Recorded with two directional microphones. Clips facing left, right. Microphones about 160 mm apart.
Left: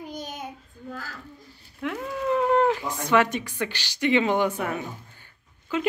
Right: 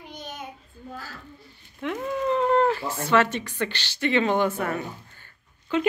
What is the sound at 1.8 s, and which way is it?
Speech, centre (ahead or behind).